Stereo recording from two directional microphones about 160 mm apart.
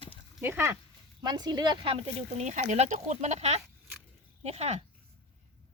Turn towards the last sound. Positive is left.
turn(degrees=-40)  # may be behind; listen again after turning